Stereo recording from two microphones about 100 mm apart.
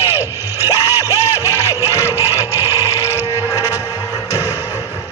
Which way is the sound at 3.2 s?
30° left (ahead or behind).